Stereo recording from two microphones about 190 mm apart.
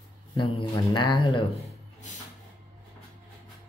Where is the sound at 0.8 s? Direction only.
25° left (ahead or behind).